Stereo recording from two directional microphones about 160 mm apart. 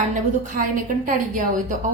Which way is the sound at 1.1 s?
55° right (ahead or behind).